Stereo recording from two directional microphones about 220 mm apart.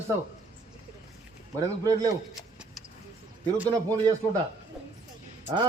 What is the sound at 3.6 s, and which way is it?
Speech, 15° right (ahead or behind).